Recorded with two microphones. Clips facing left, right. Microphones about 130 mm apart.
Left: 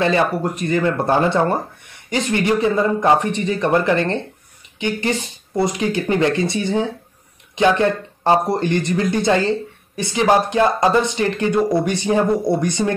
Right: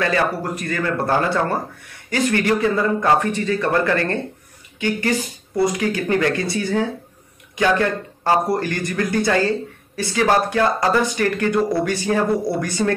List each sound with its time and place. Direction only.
0.0 s speech: 25° left (ahead or behind)